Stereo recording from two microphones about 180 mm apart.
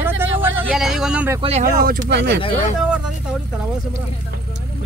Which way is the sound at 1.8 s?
55° right (ahead or behind).